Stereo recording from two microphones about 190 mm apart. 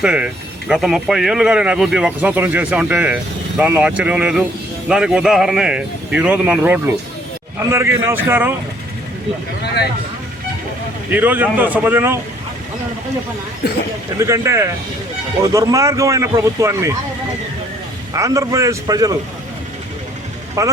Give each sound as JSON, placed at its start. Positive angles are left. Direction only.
{"t": 0.0, "sound": "a man's voice", "side_deg": -5}
{"t": 11.1, "sound": "a man's voice", "side_deg": -10}
{"t": 14.2, "sound": "a man's voice", "side_deg": -15}
{"t": 18.1, "sound": "a man's voice", "side_deg": -15}
{"t": 20.6, "sound": "a man's voice", "side_deg": -15}